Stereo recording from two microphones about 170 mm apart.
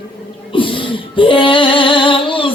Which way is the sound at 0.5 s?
30° left (ahead or behind).